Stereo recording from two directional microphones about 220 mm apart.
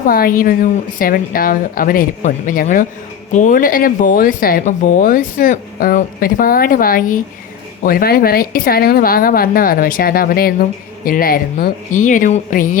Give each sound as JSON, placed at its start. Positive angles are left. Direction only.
{"t": 0.0, "sound": "speech", "side_deg": 40}